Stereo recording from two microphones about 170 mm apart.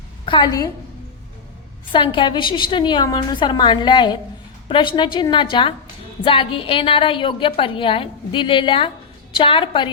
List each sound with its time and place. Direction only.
0.3 s a woman's voice: 25° left (ahead or behind)
1.9 s a woman's voice: 30° left (ahead or behind)